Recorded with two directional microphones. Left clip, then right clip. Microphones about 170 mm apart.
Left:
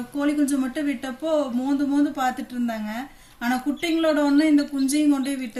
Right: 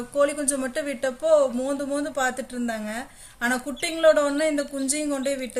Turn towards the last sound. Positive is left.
turn(degrees=-35)  # may be behind; listen again after turning